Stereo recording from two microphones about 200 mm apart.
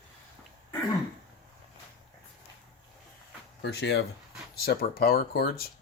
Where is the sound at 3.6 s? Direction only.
60° left (ahead or behind).